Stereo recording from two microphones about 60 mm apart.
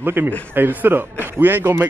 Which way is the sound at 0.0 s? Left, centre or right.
Right.